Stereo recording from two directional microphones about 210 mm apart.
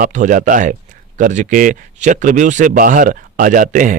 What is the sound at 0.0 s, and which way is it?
A man's voice, 40° right (ahead or behind).